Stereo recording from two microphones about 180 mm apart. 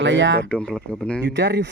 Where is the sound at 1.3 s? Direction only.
80° right.